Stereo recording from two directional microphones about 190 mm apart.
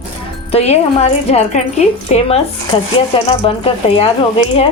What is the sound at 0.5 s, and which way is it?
Speech, 35° left (ahead or behind).